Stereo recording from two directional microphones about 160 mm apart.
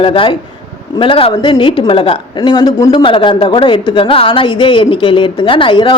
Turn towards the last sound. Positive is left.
turn(degrees=30)  # may be behind; listen again after turning